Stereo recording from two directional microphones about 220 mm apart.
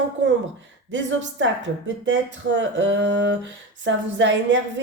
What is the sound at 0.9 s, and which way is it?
Speech, 55° right (ahead or behind).